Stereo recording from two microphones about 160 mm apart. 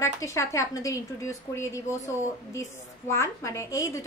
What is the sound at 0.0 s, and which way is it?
A woman's voice, 20° left (ahead or behind).